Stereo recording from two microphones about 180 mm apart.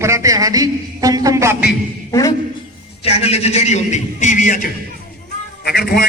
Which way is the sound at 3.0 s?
35° left (ahead or behind).